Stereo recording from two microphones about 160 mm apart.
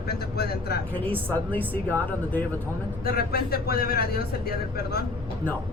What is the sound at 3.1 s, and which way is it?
Speech, 80° left.